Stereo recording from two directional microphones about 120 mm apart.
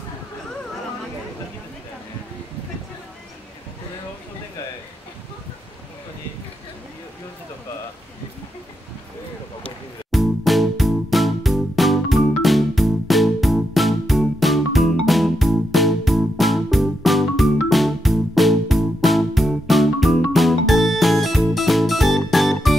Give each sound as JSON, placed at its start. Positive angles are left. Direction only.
{"t": 10.1, "sound": "music", "side_deg": 0}